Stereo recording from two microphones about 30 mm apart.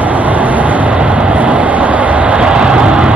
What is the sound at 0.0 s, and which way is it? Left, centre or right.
Vehicle, right.